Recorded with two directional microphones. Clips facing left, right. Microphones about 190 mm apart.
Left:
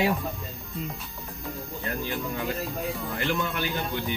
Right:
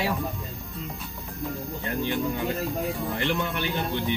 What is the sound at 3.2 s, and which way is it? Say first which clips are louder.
Speech: left 1 dB; 20° right (ahead or behind).